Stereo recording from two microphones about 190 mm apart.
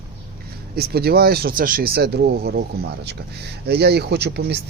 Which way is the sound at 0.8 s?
55° right (ahead or behind).